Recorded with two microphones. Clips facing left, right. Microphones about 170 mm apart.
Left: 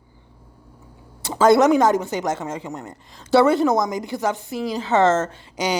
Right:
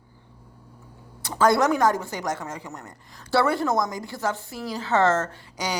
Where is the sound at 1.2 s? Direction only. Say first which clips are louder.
Left 5 dB; 25° left (ahead or behind).